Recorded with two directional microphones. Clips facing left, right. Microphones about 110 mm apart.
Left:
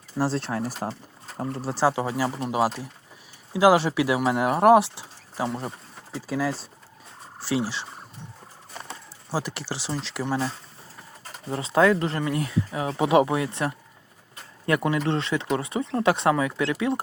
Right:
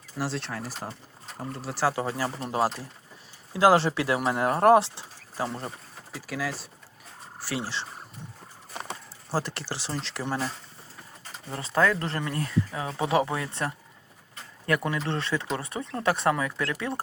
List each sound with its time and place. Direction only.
0.2 s speech: 40° left (ahead or behind)
1.4 s speech: 30° left (ahead or behind); by 7.9 s 10° left (ahead or behind)
9.3 s speech: 15° left (ahead or behind)
10.2 s speech: 5° left (ahead or behind)
11.4 s speech: 15° left (ahead or behind)